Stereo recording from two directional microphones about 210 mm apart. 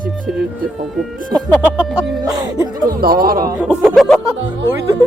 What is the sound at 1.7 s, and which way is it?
Music, 5° right (ahead or behind).